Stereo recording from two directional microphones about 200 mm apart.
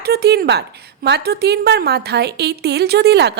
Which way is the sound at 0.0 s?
55° right (ahead or behind).